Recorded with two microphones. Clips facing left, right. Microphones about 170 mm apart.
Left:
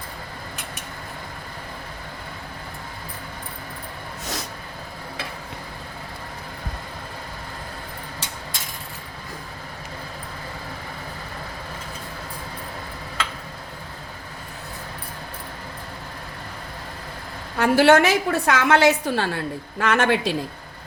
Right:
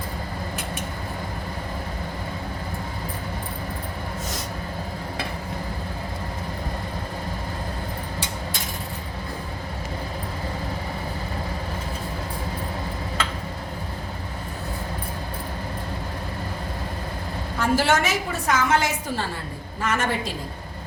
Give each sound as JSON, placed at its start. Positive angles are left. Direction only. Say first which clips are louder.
{"t": 17.6, "sound": "a woman's voice", "louder": "left 6 dB", "side_deg": 60}